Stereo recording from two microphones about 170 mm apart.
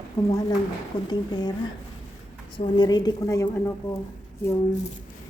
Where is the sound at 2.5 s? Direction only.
25° left (ahead or behind).